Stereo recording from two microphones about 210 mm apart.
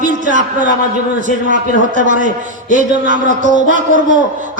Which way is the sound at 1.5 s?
35° right (ahead or behind).